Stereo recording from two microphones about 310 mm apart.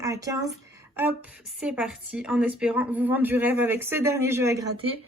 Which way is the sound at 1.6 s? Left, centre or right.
Centre.